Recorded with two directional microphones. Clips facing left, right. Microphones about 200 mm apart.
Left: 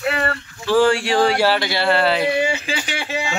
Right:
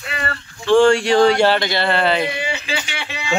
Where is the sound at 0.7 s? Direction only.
5° left (ahead or behind).